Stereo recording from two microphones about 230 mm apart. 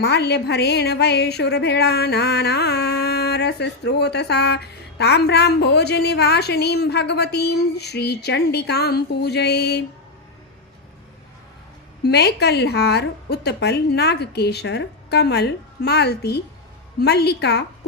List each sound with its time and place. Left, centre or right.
0.0 s a woman's voice: left
12.0 s a woman's voice: left